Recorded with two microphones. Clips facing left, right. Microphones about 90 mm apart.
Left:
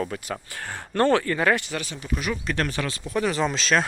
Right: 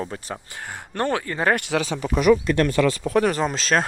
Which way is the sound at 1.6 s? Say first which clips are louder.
Right 8 dB; 80° right.